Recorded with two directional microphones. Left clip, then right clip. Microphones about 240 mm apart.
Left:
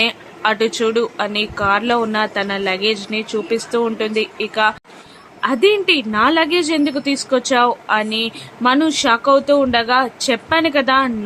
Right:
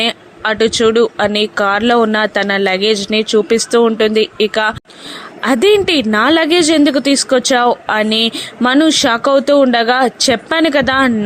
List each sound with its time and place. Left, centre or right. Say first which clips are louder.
0.0 s speech: right 1 dB; right